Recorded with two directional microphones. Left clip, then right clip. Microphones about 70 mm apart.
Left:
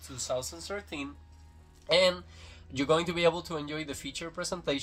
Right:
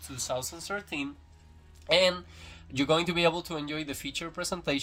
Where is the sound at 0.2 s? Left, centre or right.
Right.